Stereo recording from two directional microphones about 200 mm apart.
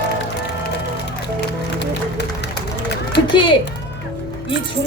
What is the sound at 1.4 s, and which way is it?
Music, 55° left (ahead or behind).